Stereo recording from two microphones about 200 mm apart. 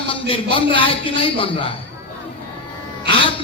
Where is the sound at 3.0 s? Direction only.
25° left (ahead or behind).